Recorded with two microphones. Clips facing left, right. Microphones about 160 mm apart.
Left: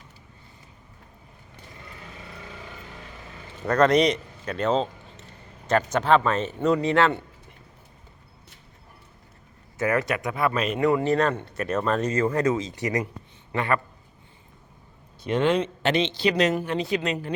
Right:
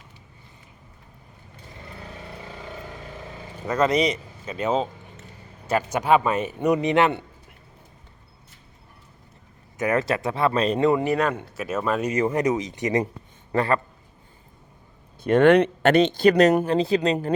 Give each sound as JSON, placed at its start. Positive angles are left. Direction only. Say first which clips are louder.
{"t": 3.7, "sound": "speech", "louder": "left 2 dB", "side_deg": -5}
{"t": 9.7, "sound": "speech", "louder": "right 1 dB", "side_deg": -20}
{"t": 13.5, "sound": "a man's voice", "louder": "right 3 dB", "side_deg": -35}
{"t": 15.2, "sound": "speech", "louder": "right 7 dB", "side_deg": -55}